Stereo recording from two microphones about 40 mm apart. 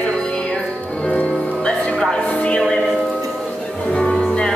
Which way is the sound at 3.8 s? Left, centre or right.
Left.